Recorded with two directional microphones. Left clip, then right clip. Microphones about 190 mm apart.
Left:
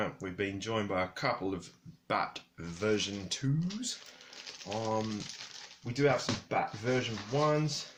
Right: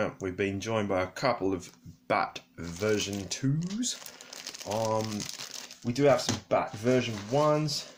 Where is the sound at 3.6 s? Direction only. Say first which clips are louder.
Right 4 dB; 50° right (ahead or behind).